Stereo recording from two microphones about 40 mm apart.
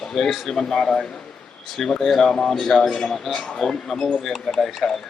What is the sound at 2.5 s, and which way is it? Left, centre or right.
Speech, centre.